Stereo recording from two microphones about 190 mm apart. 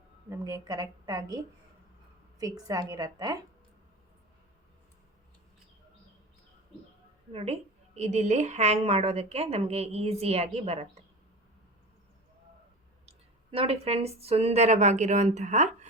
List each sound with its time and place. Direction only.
0.3 s a woman's voice: 20° right (ahead or behind)
2.4 s a woman's voice: 20° right (ahead or behind)
7.3 s a woman's voice: 35° right (ahead or behind)
13.1 s speech: 30° right (ahead or behind)